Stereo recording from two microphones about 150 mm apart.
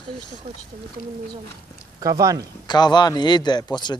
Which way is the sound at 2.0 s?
20° right (ahead or behind).